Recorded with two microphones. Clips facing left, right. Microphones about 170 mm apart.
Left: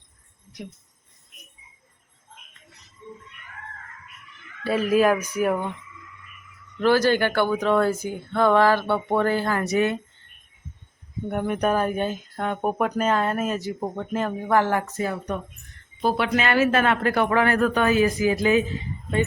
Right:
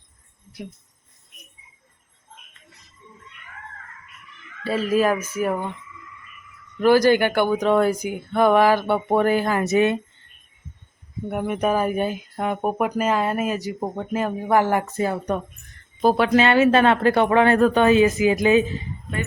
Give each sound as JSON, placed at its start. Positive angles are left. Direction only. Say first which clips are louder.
{"t": 4.9, "sound": "speech", "louder": "left 1 dB", "side_deg": 0}
{"t": 6.7, "sound": "speech", "louder": "right 4 dB", "side_deg": -10}
{"t": 11.3, "sound": "speech", "louder": "right 1 dB", "side_deg": -5}
{"t": 14.9, "sound": "speech", "louder": "right 4 dB", "side_deg": -30}
{"t": 16.0, "sound": "speech", "louder": "right 5 dB", "side_deg": -40}